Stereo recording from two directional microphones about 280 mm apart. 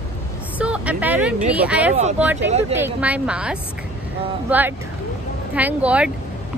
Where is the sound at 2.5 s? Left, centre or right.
Right.